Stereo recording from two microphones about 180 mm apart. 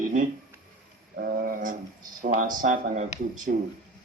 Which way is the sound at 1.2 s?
55° right (ahead or behind).